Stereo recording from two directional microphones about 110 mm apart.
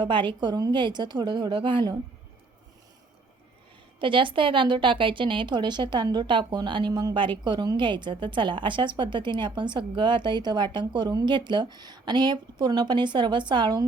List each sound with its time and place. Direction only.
0.0 s a woman's voice: 45° right (ahead or behind)
4.0 s a woman's voice: 50° right (ahead or behind)